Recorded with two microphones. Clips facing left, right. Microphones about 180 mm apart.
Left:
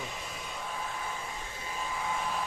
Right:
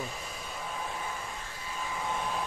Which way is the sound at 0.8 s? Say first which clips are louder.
Right 1 dB; 15° right (ahead or behind).